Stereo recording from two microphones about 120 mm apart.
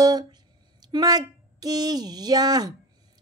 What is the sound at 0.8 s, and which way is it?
Speech, 35° right (ahead or behind).